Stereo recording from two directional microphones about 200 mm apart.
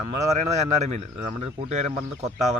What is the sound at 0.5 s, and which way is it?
Speech, 35° right (ahead or behind).